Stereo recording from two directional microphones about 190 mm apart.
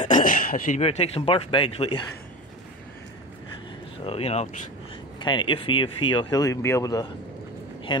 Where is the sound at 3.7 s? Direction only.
30° left (ahead or behind).